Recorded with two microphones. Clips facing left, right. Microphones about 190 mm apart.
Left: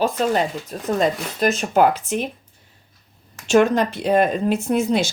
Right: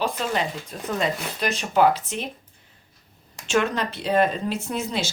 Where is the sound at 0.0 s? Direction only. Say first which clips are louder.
Left 6 dB; 45° left (ahead or behind).